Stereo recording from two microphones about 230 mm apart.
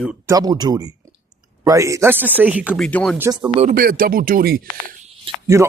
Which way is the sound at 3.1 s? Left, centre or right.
Centre.